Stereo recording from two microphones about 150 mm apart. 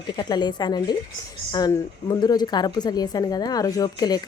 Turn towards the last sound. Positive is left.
turn(degrees=25)  # may be behind; listen again after turning